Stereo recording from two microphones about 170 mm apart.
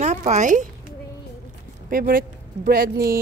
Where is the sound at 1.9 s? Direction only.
55° right (ahead or behind).